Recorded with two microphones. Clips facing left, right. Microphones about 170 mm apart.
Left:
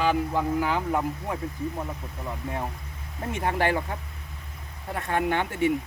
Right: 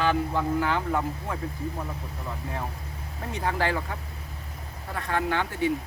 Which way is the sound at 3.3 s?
25° left (ahead or behind).